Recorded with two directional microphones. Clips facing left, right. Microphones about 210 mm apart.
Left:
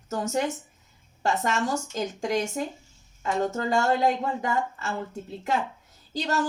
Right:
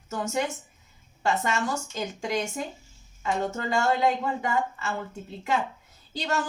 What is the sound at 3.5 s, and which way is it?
A woman's voice, 40° left (ahead or behind).